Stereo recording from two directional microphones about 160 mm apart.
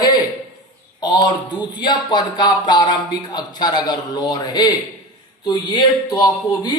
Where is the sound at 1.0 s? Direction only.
30° left (ahead or behind).